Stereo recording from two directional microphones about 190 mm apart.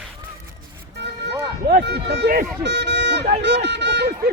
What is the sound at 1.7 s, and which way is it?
Speech, 60° right (ahead or behind).